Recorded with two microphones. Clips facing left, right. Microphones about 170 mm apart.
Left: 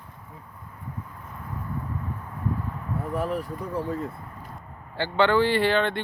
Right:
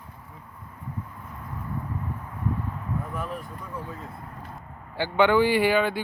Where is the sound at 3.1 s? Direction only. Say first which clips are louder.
Left 6 dB; 35° left (ahead or behind).